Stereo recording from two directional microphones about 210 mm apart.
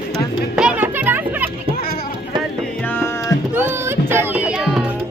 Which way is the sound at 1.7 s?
45° left (ahead or behind).